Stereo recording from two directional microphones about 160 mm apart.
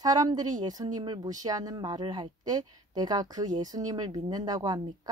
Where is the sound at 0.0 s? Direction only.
25° right (ahead or behind).